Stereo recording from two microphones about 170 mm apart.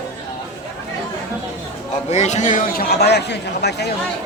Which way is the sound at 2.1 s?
40° left (ahead or behind).